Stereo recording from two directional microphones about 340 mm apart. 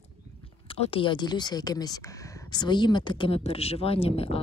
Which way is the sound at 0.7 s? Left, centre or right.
Centre.